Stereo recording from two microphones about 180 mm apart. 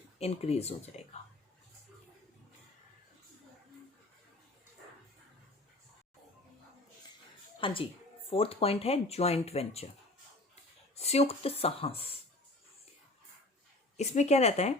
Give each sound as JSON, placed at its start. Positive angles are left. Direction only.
{"t": 0.2, "sound": "speech", "side_deg": 35}
{"t": 7.6, "sound": "speech", "side_deg": 30}
{"t": 13.9, "sound": "speech", "side_deg": 40}